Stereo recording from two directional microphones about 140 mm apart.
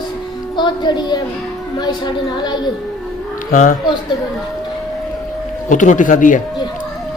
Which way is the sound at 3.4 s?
70° left (ahead or behind).